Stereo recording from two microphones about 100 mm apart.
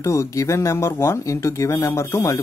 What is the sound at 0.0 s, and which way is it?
Speech, 30° left (ahead or behind).